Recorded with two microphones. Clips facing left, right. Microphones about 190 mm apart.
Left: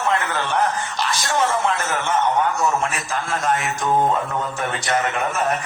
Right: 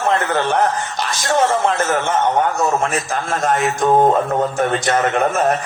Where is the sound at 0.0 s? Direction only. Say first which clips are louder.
Right 5 dB; 50° right (ahead or behind).